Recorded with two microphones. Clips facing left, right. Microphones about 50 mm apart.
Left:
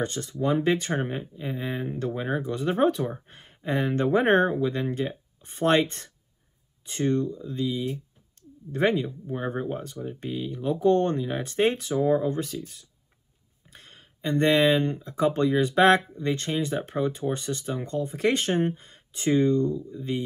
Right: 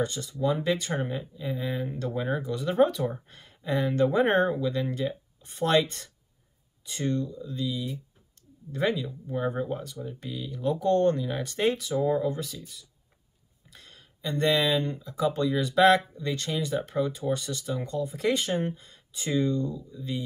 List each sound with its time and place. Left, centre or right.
0.0 s speech: left
9.3 s speech: left